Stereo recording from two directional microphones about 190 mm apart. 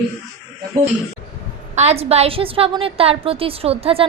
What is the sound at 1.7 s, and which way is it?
A woman's voice, 35° right (ahead or behind).